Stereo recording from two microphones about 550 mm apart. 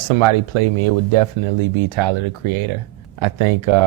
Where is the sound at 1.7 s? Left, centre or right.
Right.